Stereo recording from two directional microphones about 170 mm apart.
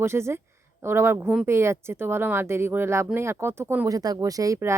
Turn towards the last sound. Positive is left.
turn(degrees=-20)  # may be behind; listen again after turning